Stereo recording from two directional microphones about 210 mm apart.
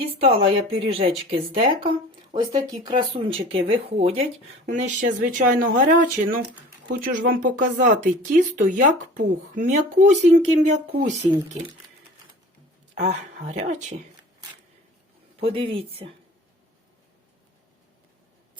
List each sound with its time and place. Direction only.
0.0 s speech: 25° right (ahead or behind)
13.0 s speech: 35° right (ahead or behind)
15.4 s speech: 25° right (ahead or behind)